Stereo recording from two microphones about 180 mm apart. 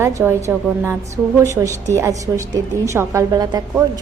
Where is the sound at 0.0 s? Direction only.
15° right (ahead or behind).